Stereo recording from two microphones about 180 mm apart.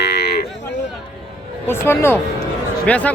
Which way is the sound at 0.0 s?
65° left (ahead or behind).